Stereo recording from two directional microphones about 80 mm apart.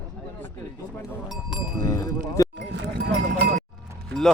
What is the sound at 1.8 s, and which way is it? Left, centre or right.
Cowbell, left.